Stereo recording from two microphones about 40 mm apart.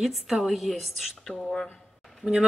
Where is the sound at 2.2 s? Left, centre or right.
Left.